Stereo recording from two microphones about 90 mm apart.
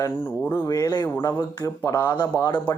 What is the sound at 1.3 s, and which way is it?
Speech, 45° left (ahead or behind).